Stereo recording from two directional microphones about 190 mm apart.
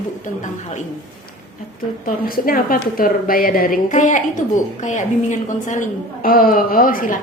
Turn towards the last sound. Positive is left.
turn(degrees=45)  # may be behind; listen again after turning